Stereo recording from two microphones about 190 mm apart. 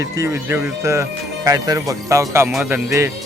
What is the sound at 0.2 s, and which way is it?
Speech, 15° right (ahead or behind).